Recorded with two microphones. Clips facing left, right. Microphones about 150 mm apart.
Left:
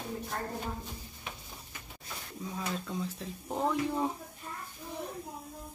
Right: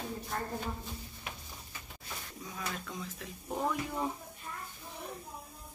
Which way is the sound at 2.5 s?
30° left (ahead or behind).